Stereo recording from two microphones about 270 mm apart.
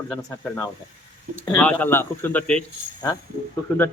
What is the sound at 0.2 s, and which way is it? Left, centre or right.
A man's voice, centre.